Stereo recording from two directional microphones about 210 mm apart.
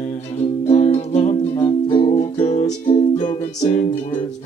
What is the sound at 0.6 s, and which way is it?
Music, 30° left (ahead or behind).